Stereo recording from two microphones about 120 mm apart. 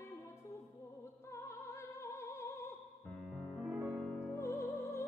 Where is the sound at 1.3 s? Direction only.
25° left (ahead or behind).